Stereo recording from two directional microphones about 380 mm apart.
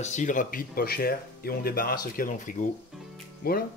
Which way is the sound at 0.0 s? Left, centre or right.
Centre.